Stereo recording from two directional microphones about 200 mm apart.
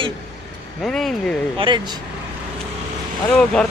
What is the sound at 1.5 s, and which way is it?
Speech, 25° right (ahead or behind).